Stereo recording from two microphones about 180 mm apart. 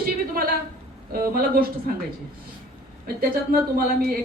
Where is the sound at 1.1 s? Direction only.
55° right (ahead or behind).